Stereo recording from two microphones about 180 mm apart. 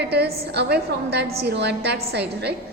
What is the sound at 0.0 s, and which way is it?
A woman's voice, 65° right (ahead or behind).